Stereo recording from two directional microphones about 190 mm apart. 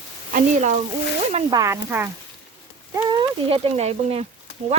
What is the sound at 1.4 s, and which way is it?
Speech, 15° right (ahead or behind).